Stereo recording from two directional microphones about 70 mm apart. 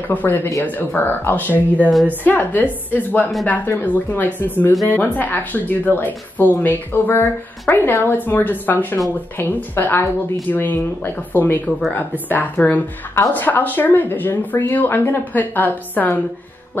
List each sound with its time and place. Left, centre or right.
0.1 s speech: left